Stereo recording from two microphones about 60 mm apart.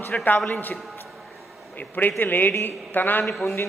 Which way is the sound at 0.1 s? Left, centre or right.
Left.